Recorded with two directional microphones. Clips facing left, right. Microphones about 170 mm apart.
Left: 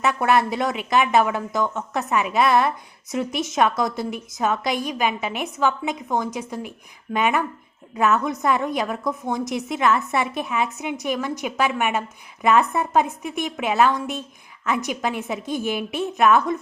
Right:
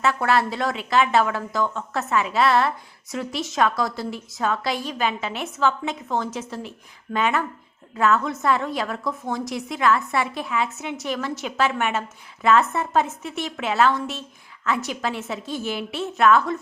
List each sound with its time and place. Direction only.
0.0 s a woman's voice: 20° left (ahead or behind)